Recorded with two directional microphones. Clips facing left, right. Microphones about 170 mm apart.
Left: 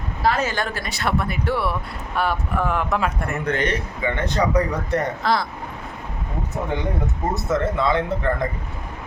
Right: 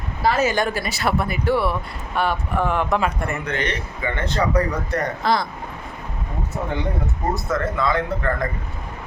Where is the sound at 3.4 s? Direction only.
45° left (ahead or behind).